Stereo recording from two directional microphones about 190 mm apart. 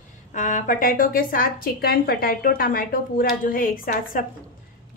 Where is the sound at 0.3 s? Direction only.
40° left (ahead or behind).